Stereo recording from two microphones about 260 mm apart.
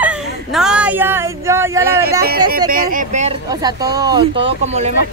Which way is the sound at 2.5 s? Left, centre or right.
Right.